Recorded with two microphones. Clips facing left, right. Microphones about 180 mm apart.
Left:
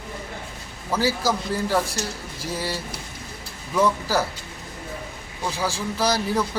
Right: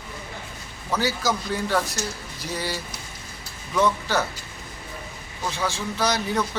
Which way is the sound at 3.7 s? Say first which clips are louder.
Left 1 dB; 5° left (ahead or behind).